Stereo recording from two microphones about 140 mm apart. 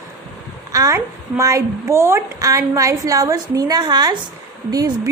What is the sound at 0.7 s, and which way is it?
A woman's voice, 25° right (ahead or behind).